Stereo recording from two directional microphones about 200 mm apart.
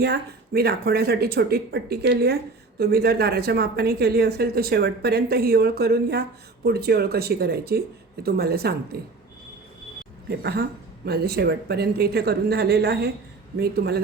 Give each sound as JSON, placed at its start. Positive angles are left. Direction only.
{"t": 0.0, "sound": "speech", "side_deg": -50}
{"t": 10.2, "sound": "speech", "side_deg": -55}